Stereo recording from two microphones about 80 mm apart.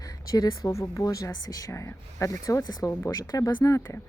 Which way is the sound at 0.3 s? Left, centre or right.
Left.